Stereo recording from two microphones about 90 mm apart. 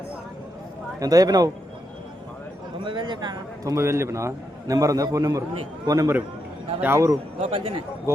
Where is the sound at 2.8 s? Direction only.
60° right (ahead or behind).